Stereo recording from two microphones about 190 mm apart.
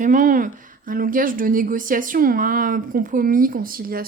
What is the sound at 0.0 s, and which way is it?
A woman's voice, 45° right (ahead or behind).